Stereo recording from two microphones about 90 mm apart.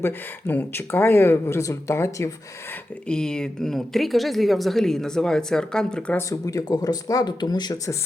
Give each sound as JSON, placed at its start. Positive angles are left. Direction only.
{"t": 0.0, "sound": "speech", "side_deg": 20}
{"t": 3.1, "sound": "speech", "side_deg": 10}
{"t": 6.1, "sound": "speech", "side_deg": 35}